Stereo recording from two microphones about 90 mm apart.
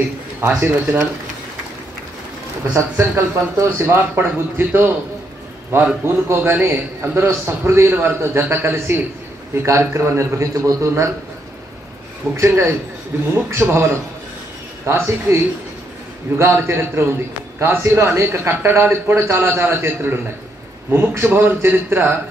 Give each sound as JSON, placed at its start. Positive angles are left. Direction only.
{"t": 0.4, "sound": "a man's voice", "side_deg": -20}
{"t": 2.7, "sound": "a man's voice", "side_deg": -25}
{"t": 12.4, "sound": "a man's voice", "side_deg": -30}